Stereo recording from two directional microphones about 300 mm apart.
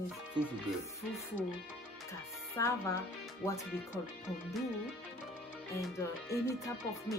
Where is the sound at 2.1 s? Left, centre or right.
Centre.